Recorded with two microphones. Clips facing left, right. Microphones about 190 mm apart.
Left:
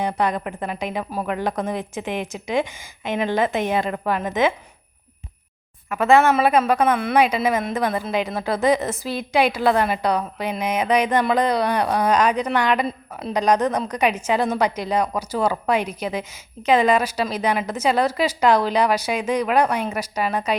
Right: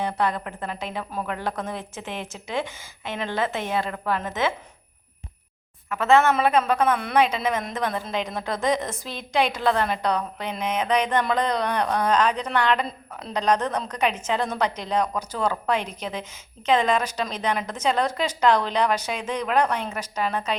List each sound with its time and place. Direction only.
0.0 s a woman's voice: 15° left (ahead or behind)
5.9 s a woman's voice: 10° left (ahead or behind)